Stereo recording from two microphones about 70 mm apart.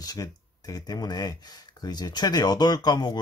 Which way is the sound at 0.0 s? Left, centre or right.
Left.